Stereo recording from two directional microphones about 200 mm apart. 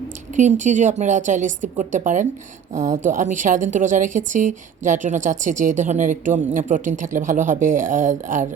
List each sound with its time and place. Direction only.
0.3 s a woman's voice: 40° right (ahead or behind)